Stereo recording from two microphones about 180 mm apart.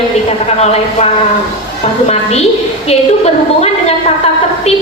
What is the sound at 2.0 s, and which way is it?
A woman's voice, 35° left (ahead or behind).